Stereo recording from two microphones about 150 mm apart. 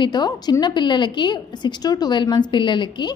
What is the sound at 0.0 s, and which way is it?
A woman's voice, 30° left (ahead or behind).